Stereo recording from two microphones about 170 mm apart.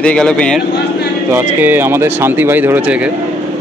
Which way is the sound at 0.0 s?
5° left (ahead or behind).